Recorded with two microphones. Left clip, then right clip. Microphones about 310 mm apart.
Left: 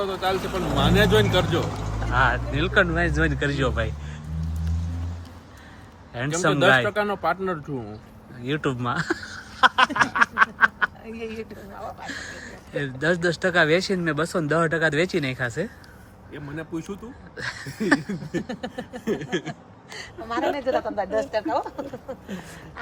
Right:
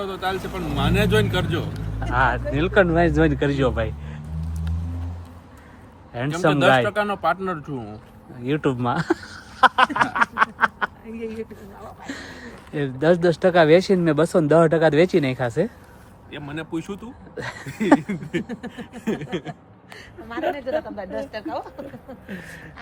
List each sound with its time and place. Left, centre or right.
0.0 s speech: centre
0.3 s a woman's voice: left
0.8 s speech: centre
6.1 s speech: centre
12.0 s speech: centre
17.3 s speech: centre
18.4 s a sound: centre
19.0 s a sound: right
20.0 s a woman's voice: left